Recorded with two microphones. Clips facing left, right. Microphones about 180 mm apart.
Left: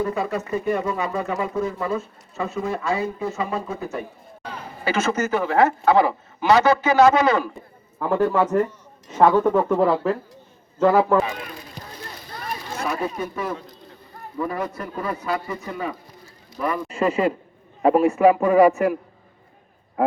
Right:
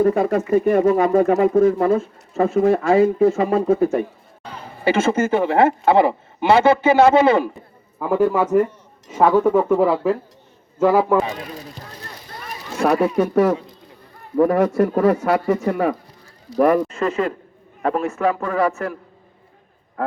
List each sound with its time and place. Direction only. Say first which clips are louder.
0.0 s speech: right 8 dB; 50° right (ahead or behind)
4.8 s speech: right 5 dB; 30° right (ahead or behind)
7.9 s speech: right 2 dB; 10° right (ahead or behind)
12.8 s speech: right 10 dB; 80° right
15.6 s speech: right 10 dB; 60° right (ahead or behind)
16.9 s a man's voice: left 1 dB; 10° left (ahead or behind)
20.0 s a man's voice: left 4 dB; 10° left (ahead or behind)